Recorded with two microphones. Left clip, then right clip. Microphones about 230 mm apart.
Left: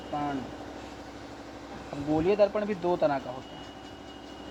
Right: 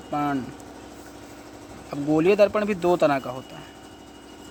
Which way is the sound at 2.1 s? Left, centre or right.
Right.